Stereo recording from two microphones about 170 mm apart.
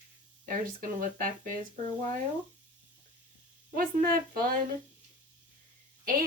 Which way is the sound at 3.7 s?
55° right (ahead or behind).